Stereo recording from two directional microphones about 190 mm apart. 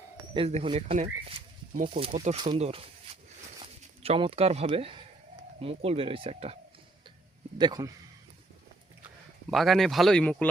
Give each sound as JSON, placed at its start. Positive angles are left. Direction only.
{"t": 0.3, "sound": "speech", "side_deg": -30}
{"t": 7.6, "sound": "speech", "side_deg": -20}
{"t": 9.5, "sound": "speech", "side_deg": 0}